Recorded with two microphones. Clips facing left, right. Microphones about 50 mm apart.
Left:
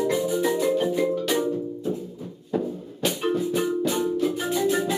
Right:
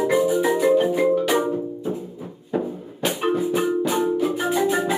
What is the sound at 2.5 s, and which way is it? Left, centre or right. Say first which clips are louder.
Music: right 2 dB; right.